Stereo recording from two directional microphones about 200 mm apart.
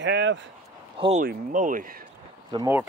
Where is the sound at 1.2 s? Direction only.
40° right (ahead or behind).